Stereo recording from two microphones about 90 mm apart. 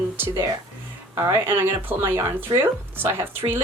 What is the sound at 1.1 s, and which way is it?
Speech, 45° right (ahead or behind).